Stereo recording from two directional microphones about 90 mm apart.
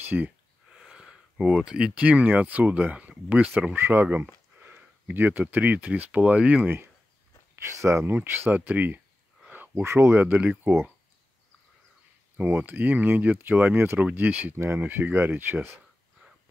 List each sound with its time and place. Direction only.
0.7 s speech: 5° right (ahead or behind)
7.8 s speech: 30° right (ahead or behind)
9.5 s a sound: 20° right (ahead or behind)
9.8 s speech: 30° right (ahead or behind)
10.2 s speech: 15° right (ahead or behind)
12.4 s speech: 20° right (ahead or behind)